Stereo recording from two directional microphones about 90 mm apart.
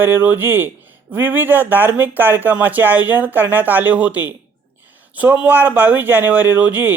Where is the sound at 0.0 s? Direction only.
20° right (ahead or behind).